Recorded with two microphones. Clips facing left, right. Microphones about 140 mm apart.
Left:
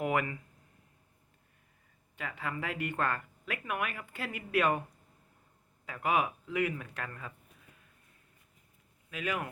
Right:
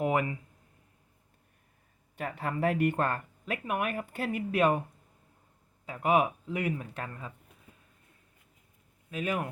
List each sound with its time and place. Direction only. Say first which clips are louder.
0.0 s speech: right 3 dB; 30° right (ahead or behind)
2.1 s speech: right 5 dB; 40° right (ahead or behind)
5.8 s speech: right 4 dB; 30° right (ahead or behind)
9.0 s speech: right 3 dB; 35° right (ahead or behind)